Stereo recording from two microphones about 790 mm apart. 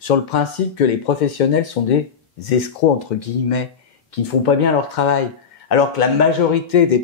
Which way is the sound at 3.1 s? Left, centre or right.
Left.